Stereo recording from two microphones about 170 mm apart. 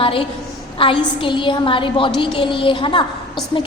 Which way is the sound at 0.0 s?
30° left (ahead or behind).